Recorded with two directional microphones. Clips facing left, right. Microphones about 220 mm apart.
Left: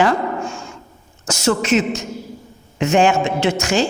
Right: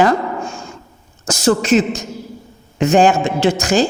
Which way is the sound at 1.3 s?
35° right (ahead or behind).